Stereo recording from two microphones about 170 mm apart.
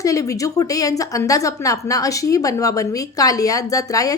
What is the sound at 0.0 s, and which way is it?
A woman's voice, 20° left (ahead or behind).